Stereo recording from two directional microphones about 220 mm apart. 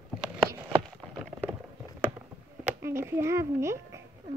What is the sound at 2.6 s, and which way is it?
A child's voice, 10° right (ahead or behind).